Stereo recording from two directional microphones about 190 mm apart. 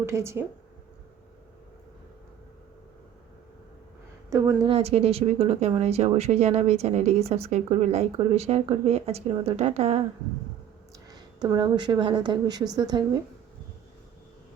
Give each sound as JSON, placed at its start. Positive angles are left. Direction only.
{"t": 0.0, "sound": "a woman's voice", "side_deg": -15}
{"t": 4.3, "sound": "a woman's voice", "side_deg": -15}
{"t": 4.7, "sound": "speech", "side_deg": -30}
{"t": 11.1, "sound": "speech", "side_deg": -20}